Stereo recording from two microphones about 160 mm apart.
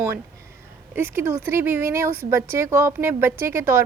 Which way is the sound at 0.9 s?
15° right (ahead or behind).